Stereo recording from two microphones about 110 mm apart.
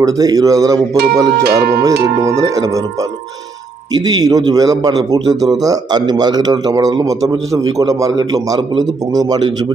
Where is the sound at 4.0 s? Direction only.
35° right (ahead or behind).